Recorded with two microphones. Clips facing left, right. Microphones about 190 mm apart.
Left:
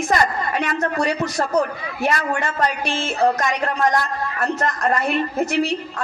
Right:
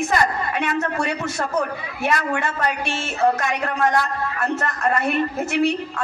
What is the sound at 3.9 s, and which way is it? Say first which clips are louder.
A woman's voice: even; 40° left (ahead or behind).